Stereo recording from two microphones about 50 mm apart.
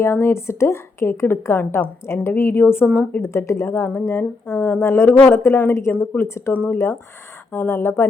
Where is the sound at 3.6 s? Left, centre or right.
Left.